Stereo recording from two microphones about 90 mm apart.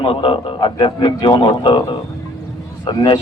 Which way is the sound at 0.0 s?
85° left.